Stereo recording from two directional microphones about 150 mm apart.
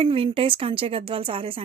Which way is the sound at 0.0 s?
40° right (ahead or behind).